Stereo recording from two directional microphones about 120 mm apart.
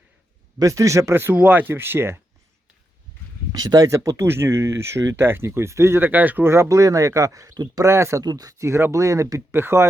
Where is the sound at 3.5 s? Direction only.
35° right (ahead or behind).